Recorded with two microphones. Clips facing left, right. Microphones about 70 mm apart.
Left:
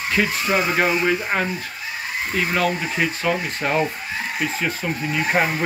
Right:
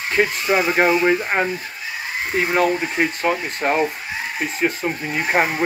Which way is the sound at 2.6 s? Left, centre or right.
Right.